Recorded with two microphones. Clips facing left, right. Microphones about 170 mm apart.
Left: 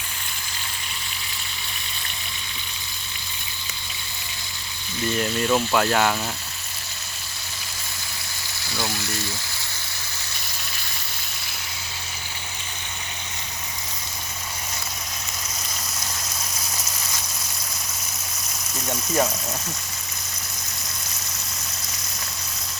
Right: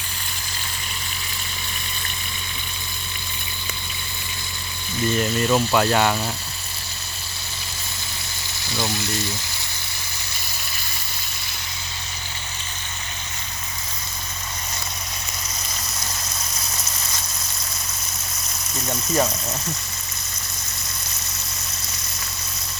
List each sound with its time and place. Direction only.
5.1 s speech: centre (ahead or behind)
8.7 s speech: 20° right (ahead or behind)
18.9 s speech: centre (ahead or behind)